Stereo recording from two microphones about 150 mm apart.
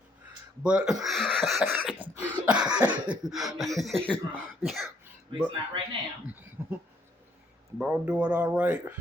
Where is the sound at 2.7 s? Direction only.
5° right (ahead or behind).